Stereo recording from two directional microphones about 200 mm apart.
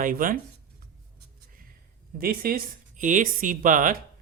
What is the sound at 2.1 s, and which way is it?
Speech, 50° right (ahead or behind).